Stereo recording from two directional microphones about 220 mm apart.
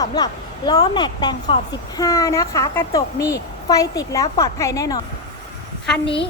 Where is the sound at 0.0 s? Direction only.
20° left (ahead or behind).